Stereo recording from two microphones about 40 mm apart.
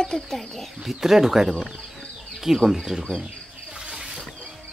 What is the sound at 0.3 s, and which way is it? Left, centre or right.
Speech, centre.